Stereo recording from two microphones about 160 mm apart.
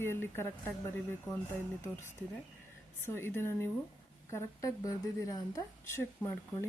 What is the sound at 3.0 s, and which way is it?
A woman's voice, 15° left (ahead or behind).